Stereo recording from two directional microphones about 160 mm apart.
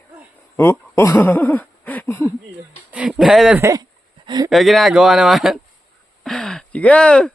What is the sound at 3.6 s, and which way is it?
Speech, 20° right (ahead or behind).